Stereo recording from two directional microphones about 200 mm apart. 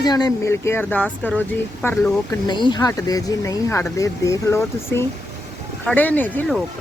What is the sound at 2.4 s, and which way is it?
Speech, 20° left (ahead or behind).